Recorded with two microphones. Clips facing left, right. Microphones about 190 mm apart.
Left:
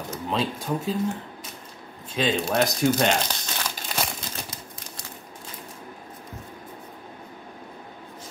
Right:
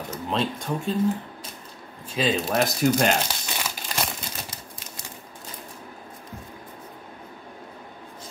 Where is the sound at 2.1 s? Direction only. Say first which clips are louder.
Even; centre (ahead or behind).